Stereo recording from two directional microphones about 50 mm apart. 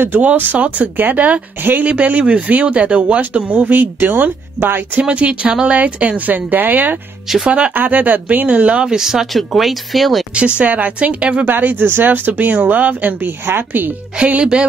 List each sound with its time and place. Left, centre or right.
0.4 s speech: right
5.0 s speech: right
7.4 s speech: right
7.7 s speech: right
8.5 s speech: right; by 10.2 s centre
10.3 s speech: right
11.4 s speech: right
14.1 s speech: right